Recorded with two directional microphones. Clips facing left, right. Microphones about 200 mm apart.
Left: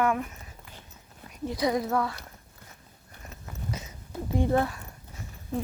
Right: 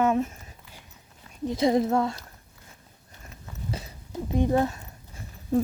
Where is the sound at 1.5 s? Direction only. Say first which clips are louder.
Right 4 dB; 25° right (ahead or behind).